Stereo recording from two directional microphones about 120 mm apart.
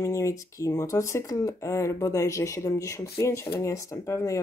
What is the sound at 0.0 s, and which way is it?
Speech, 25° left (ahead or behind).